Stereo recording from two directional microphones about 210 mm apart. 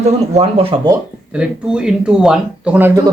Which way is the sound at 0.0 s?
30° right (ahead or behind).